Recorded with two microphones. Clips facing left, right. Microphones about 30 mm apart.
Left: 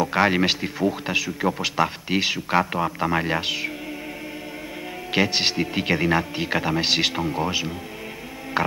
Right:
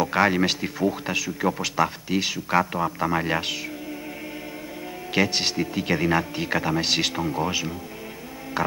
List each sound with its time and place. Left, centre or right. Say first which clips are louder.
0.0 s speech: left 1 dB; centre
5.1 s speech: left 2 dB; centre
8.6 s a sound: left 2 dB; left